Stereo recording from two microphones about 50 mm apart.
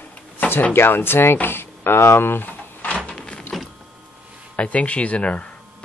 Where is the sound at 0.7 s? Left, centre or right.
Left.